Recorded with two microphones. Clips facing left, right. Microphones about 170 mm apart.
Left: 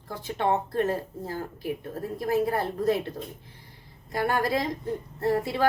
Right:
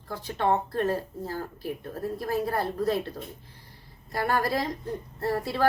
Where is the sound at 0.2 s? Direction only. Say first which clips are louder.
Even; 20° left (ahead or behind).